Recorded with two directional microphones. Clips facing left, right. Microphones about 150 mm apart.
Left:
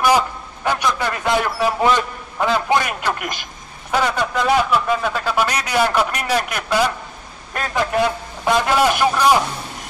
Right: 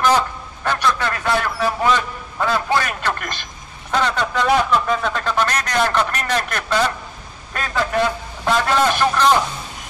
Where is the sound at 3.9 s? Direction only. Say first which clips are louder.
Left 1 dB; 10° left (ahead or behind).